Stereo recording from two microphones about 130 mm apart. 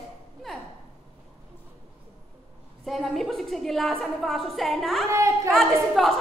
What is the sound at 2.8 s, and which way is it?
A woman's voice, centre (ahead or behind).